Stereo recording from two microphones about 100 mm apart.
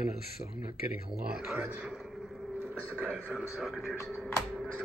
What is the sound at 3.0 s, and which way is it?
Speech, 10° right (ahead or behind).